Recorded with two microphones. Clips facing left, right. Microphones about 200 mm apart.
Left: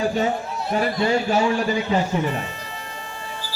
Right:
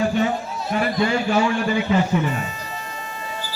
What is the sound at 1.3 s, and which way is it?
A man's voice, 35° left (ahead or behind).